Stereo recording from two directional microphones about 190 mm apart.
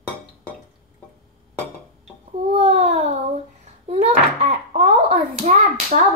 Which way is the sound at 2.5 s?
35° right (ahead or behind).